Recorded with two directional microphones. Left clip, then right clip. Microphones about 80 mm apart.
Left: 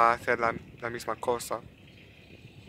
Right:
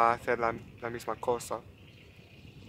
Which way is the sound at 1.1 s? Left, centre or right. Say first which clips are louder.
Left 1 dB; centre.